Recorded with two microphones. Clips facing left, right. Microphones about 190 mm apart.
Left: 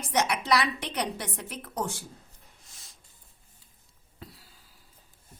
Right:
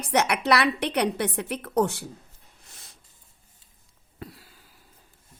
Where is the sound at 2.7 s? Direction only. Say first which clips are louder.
Right 8 dB; 60° right (ahead or behind).